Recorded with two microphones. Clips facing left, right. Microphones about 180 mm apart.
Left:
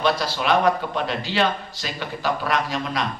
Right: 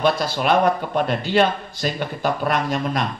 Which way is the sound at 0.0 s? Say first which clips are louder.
Right 3 dB; 50° right (ahead or behind).